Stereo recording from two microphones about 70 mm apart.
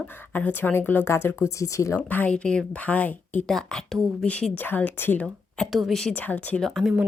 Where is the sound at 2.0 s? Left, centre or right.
Left.